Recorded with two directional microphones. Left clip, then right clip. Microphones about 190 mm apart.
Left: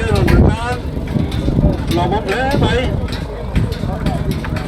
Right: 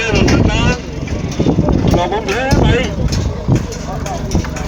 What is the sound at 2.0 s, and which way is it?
Speech, 65° left (ahead or behind).